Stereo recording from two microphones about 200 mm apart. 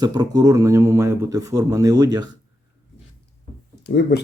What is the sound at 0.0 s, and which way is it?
Speech, 20° right (ahead or behind).